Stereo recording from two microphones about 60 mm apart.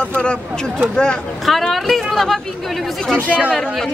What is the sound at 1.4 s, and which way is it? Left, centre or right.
Speech, centre.